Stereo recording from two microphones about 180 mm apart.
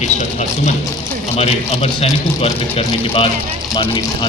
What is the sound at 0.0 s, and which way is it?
A man's voice, 40° left (ahead or behind).